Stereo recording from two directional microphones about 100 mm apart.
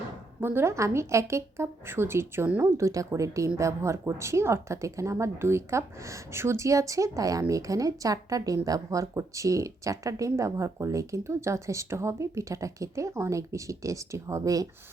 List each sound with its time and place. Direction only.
0.3 s a woman's voice: 20° right (ahead or behind); by 14.7 s 35° right (ahead or behind)